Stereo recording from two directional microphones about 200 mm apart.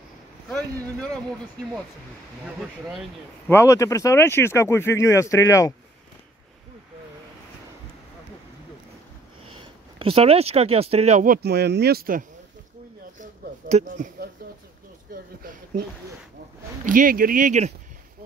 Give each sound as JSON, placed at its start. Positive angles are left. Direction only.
{"t": 3.4, "sound": "speech", "side_deg": 15}
{"t": 9.6, "sound": "speech", "side_deg": -25}
{"t": 11.4, "sound": "speech", "side_deg": -55}
{"t": 13.2, "sound": "a sound", "side_deg": -35}
{"t": 16.8, "sound": "speech", "side_deg": -40}